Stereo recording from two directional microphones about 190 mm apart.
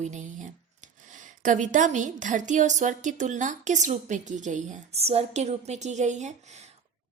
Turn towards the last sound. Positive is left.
turn(degrees=-35)  # may be behind; listen again after turning